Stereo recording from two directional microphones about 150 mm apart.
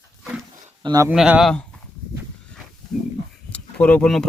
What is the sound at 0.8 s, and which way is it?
Speech, 25° right (ahead or behind).